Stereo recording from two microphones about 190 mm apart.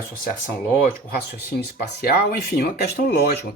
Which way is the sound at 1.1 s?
55° left (ahead or behind).